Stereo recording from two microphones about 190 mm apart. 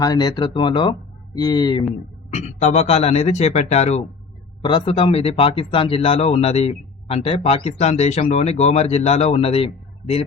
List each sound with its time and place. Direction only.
0.0 s speech: 20° left (ahead or behind)
2.3 s speech: 35° left (ahead or behind)